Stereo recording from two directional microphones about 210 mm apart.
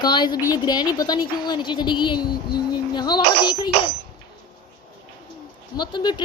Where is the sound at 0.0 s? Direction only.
20° left (ahead or behind).